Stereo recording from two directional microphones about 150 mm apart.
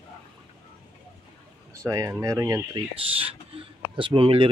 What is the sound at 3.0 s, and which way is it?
A man's voice, 40° right (ahead or behind).